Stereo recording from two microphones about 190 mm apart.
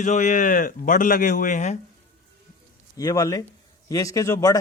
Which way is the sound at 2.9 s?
20° left (ahead or behind).